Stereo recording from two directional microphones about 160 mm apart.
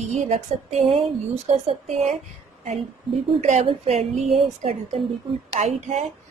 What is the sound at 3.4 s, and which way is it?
Speech, 40° right (ahead or behind).